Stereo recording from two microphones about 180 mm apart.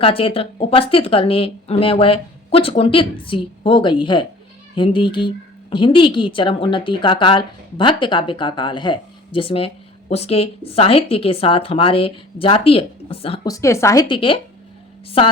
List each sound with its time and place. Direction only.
0.0 s a woman's voice: 30° left (ahead or behind)
13.5 s a woman's voice: 15° left (ahead or behind)